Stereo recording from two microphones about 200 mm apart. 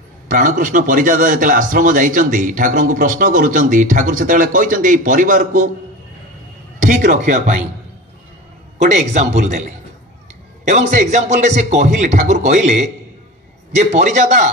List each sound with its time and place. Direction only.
0.3 s a man's voice: 40° right (ahead or behind)
6.8 s a man's voice: 40° right (ahead or behind)
8.8 s a man's voice: 35° right (ahead or behind)